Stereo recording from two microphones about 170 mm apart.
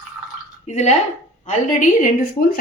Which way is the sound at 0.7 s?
40° left (ahead or behind).